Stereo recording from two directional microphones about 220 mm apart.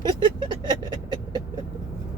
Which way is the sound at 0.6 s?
20° right (ahead or behind).